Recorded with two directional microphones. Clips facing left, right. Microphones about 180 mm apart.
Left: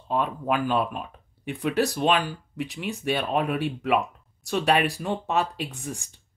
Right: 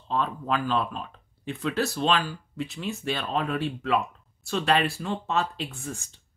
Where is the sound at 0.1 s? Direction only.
15° left (ahead or behind).